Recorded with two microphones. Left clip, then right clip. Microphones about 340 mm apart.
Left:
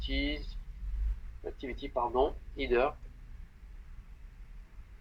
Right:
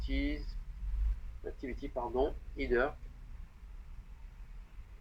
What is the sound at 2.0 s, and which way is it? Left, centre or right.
Speech, left.